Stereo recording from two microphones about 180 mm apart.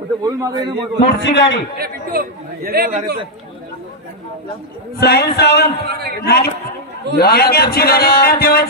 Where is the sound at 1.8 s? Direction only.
55° right (ahead or behind).